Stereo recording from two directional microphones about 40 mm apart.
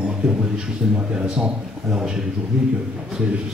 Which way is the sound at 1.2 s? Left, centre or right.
Right.